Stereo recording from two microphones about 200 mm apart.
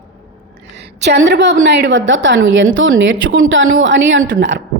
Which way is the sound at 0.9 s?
60° right (ahead or behind).